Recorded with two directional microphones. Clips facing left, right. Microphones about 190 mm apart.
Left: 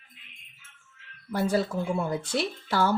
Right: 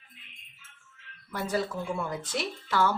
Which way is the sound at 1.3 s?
30° left (ahead or behind).